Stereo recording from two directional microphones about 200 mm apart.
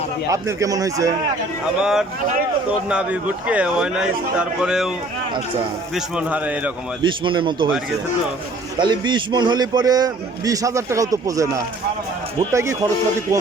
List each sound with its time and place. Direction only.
0.3 s a man's voice: 15° right (ahead or behind)
1.8 s a man's voice: centre (ahead or behind)
5.9 s a man's voice: 5° right (ahead or behind)
7.0 s a man's voice: 25° right (ahead or behind)
8.8 s a man's voice: 20° right (ahead or behind)